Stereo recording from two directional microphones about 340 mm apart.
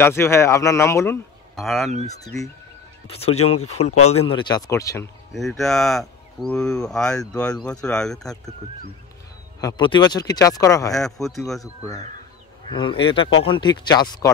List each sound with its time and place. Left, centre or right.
0.0 s speech: centre
9.6 s speech: centre
12.6 s speech: centre